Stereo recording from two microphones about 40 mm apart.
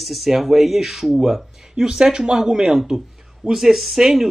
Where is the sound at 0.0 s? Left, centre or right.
Centre.